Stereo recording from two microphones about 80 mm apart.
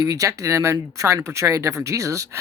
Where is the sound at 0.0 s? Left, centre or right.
Right.